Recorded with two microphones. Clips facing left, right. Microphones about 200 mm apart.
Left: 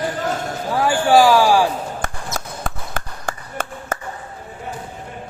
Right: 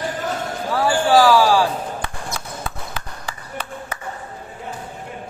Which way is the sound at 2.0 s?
45° left (ahead or behind).